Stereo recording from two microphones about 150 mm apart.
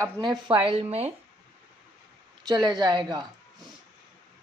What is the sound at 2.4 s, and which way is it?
Music, 30° right (ahead or behind).